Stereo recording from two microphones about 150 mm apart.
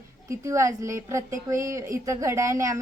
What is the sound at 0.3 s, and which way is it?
A woman's voice, 20° right (ahead or behind).